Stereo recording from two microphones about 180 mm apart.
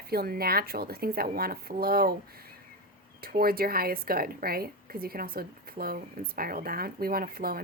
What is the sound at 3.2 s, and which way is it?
A woman's voice, 55° right (ahead or behind).